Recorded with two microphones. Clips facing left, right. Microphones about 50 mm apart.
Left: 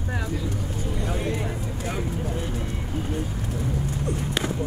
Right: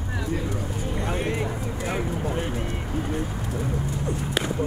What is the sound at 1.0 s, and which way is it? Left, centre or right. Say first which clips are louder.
Vehicle: right 2 dB; right.